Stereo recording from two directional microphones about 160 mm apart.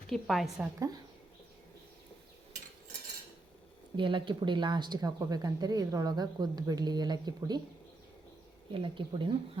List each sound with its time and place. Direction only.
0.1 s a woman's voice: centre (ahead or behind)
3.9 s speech: 30° right (ahead or behind)
8.7 s speech: 30° right (ahead or behind)